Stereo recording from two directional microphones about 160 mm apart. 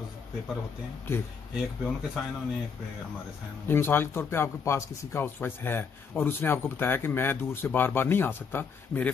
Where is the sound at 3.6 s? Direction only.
15° left (ahead or behind).